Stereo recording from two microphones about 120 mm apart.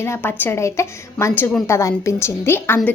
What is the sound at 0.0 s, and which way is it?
A woman's voice, 20° left (ahead or behind).